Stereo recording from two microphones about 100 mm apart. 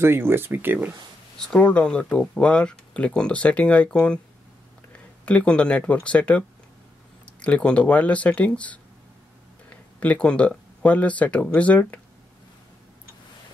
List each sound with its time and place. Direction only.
0.0 s speech: 25° right (ahead or behind)
1.5 s speech: 10° left (ahead or behind)
5.2 s speech: 10° left (ahead or behind)
7.4 s speech: 10° left (ahead or behind)
9.9 s speech: 15° left (ahead or behind)